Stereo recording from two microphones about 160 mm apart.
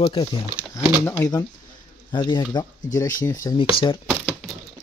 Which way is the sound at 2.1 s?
30° left (ahead or behind).